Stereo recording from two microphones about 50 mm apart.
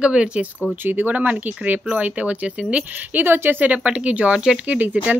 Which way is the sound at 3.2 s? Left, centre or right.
Right.